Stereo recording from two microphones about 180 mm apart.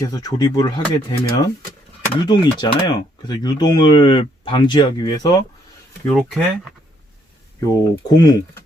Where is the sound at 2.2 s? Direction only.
25° left (ahead or behind).